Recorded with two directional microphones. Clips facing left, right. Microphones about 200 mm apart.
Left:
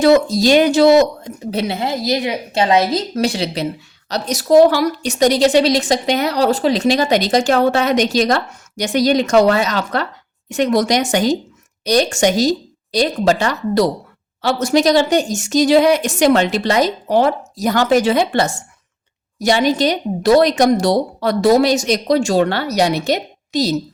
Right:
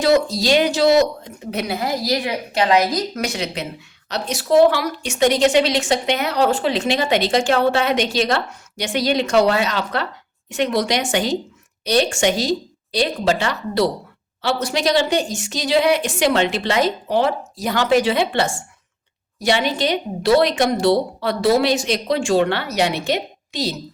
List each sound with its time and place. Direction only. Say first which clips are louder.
0.0 s a woman's voice: left 5 dB; 50° left (ahead or behind)
1.5 s a woman's voice: left 3 dB; 30° left (ahead or behind)